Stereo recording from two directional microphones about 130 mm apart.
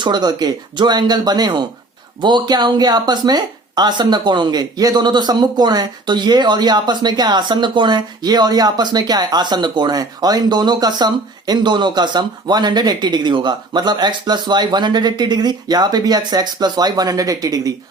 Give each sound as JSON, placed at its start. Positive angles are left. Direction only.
{"t": 0.0, "sound": "a woman's voice", "side_deg": -30}